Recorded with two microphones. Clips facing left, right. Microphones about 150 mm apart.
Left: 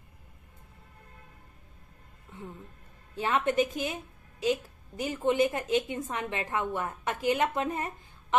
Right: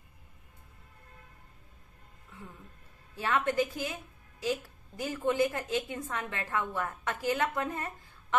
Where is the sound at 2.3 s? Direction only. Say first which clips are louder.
Left 5 dB; 25° left (ahead or behind).